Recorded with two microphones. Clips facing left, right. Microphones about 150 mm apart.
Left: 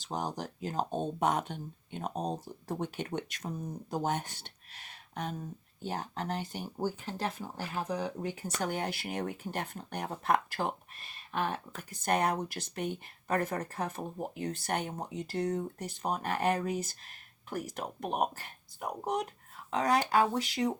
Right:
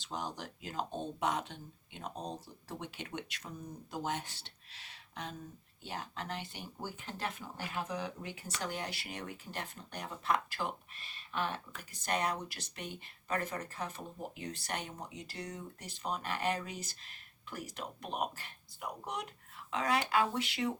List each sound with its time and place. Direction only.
0.0 s speech: 45° left (ahead or behind)